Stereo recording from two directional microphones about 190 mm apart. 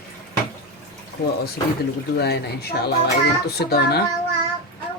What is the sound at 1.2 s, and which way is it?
Speech, 55° left (ahead or behind).